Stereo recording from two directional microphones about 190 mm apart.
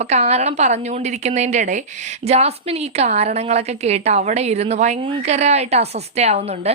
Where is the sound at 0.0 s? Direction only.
35° right (ahead or behind).